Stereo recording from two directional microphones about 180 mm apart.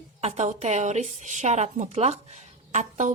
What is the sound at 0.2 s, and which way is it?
A woman's voice, 35° right (ahead or behind).